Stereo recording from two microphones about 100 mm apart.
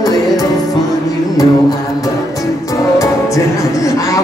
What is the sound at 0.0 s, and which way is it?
Music, 40° left (ahead or behind).